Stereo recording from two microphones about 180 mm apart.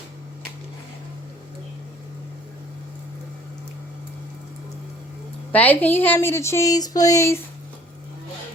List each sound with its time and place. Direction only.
5.5 s speech: 10° left (ahead or behind)